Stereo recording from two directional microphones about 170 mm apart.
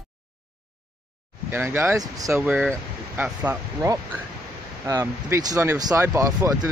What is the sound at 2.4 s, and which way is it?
Speech, 5° right (ahead or behind).